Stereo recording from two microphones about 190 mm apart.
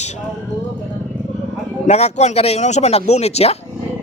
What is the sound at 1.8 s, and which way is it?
Speech, 35° left (ahead or behind).